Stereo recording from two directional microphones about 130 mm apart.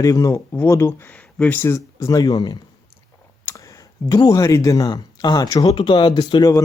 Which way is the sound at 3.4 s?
25° left (ahead or behind).